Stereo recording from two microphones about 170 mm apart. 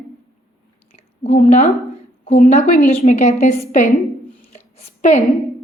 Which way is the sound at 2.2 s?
40° left (ahead or behind).